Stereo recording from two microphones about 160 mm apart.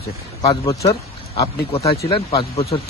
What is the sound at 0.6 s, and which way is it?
Speech, 20° left (ahead or behind).